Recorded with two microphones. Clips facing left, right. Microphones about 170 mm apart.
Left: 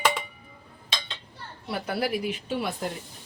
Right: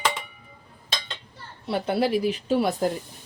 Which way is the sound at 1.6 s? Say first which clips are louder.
Right 5 dB; 25° right (ahead or behind).